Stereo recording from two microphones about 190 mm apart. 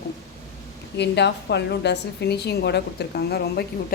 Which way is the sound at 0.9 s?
65° left (ahead or behind).